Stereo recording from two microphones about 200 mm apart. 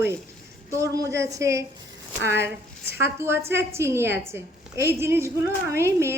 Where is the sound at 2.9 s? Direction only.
10° right (ahead or behind).